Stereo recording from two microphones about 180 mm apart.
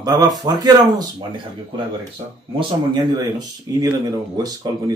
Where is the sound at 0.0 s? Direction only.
20° right (ahead or behind).